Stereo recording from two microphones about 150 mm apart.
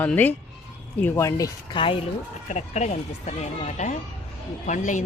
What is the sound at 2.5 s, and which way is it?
Speech, 50° left (ahead or behind).